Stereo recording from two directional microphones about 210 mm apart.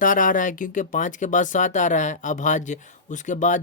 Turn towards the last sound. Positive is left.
turn(degrees=35)  # may be behind; listen again after turning